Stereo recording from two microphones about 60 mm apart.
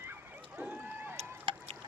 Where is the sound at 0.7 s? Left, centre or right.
Right.